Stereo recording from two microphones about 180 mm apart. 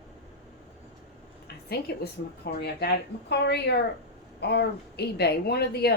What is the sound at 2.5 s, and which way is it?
Speech, 65° left (ahead or behind).